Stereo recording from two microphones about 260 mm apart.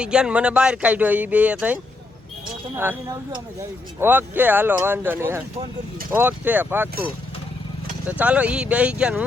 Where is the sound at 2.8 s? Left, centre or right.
Centre.